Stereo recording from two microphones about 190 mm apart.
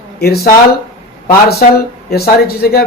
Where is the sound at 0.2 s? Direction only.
55° left (ahead or behind).